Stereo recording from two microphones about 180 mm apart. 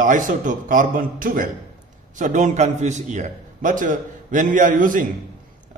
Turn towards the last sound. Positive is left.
turn(degrees=-50)  # may be behind; listen again after turning